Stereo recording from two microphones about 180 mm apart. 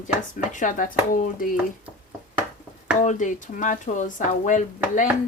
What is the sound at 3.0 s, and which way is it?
Speech, 45° left (ahead or behind).